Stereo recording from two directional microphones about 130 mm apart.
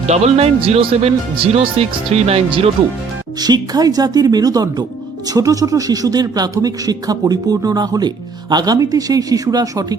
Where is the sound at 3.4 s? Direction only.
30° right (ahead or behind).